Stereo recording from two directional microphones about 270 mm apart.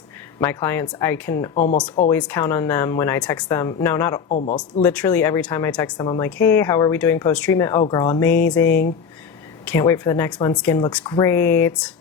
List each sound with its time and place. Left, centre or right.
0.3 s speech: centre
1.5 s speech: left
2.0 s speech: centre
4.3 s speech: left
4.5 s speech: centre